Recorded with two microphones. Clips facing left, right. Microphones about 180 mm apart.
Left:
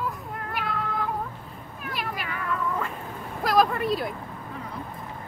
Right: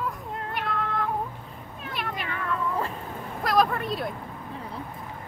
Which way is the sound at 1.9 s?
5° left (ahead or behind).